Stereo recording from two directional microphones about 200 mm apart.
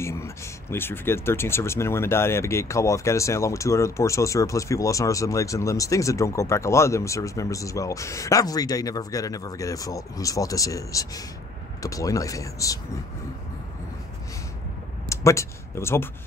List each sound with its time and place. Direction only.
0.0 s speech: 15° left (ahead or behind)
15.0 s speech: 15° left (ahead or behind)